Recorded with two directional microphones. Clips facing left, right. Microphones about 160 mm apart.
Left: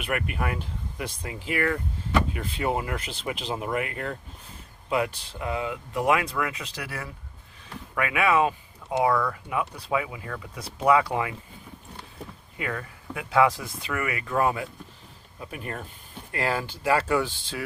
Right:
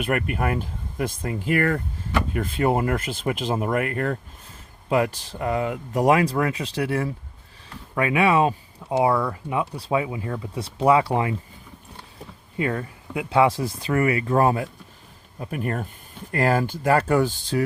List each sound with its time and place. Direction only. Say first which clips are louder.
0.0 s speech: right 5 dB; 45° right (ahead or behind); by 11.3 s 30° right (ahead or behind)
12.5 s speech: right 7 dB; 30° right (ahead or behind)